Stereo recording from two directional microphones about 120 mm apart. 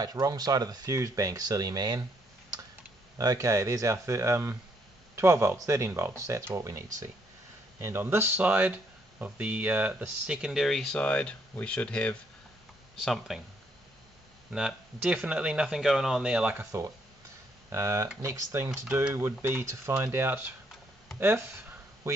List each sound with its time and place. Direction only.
0.0 s speech: 30° right (ahead or behind)
3.2 s speech: 30° right (ahead or behind); by 13.4 s centre (ahead or behind)
14.5 s speech: 5° right (ahead or behind)
17.6 s speech: 20° right (ahead or behind)